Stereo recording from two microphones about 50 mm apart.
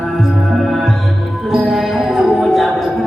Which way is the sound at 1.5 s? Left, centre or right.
Centre.